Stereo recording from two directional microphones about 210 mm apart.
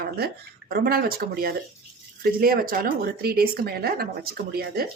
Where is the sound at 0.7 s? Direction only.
45° right (ahead or behind).